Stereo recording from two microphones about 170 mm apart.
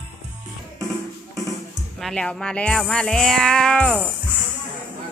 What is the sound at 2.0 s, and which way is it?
Music, 5° left (ahead or behind).